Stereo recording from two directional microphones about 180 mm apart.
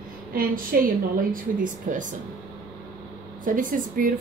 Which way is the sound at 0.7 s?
55° right (ahead or behind).